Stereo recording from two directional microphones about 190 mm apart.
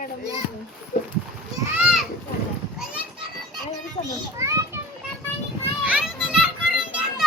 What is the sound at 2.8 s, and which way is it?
Children playing, 5° right (ahead or behind).